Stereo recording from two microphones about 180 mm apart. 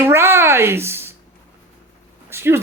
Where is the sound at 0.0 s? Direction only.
15° right (ahead or behind).